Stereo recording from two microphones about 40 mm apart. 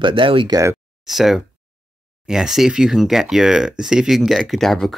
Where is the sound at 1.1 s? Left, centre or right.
Centre.